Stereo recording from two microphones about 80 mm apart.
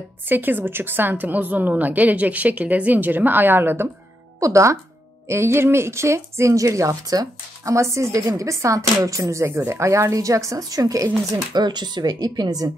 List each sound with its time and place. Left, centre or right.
0.3 s a woman's voice: right
4.4 s speech: right
11.5 s speech: right